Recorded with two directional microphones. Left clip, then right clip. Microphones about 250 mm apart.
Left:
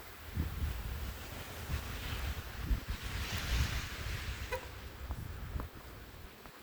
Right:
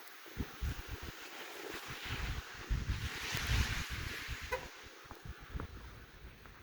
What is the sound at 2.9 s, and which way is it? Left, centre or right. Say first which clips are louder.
Boat: right 2 dB; right.